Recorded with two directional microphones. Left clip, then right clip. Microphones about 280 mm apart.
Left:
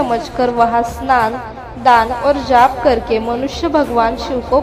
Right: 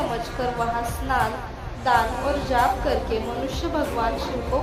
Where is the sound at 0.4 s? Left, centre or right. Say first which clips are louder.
Left 12 dB; centre.